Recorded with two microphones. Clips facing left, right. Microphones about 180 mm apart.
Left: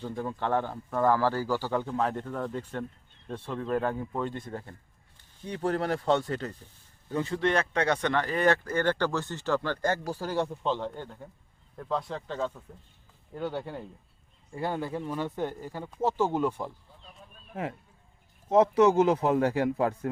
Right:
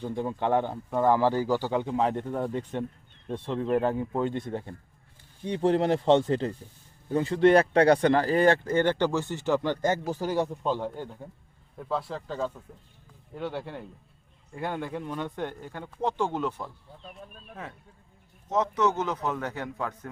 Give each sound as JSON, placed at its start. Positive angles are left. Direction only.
{"t": 0.2, "sound": "speech", "side_deg": -15}
{"t": 16.9, "sound": "a sound", "side_deg": -65}
{"t": 18.4, "sound": "speech", "side_deg": 30}